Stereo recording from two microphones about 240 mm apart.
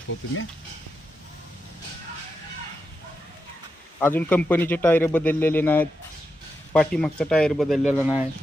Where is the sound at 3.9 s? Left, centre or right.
Centre.